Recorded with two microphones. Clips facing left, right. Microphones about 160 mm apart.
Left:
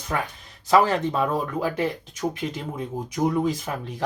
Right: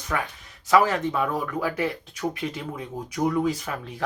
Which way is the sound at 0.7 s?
30° left (ahead or behind).